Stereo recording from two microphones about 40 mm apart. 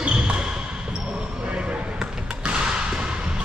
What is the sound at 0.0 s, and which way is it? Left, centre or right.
Basketball bounce, right.